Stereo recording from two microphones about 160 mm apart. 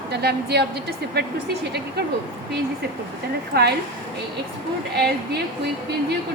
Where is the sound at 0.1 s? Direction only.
90° right.